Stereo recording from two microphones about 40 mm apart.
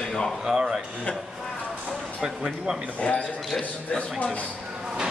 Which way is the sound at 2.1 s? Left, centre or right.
Centre.